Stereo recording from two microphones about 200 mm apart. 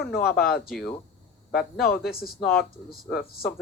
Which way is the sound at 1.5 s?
Centre (ahead or behind).